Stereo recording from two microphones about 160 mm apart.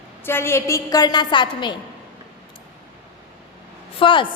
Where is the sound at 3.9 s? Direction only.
30° left (ahead or behind).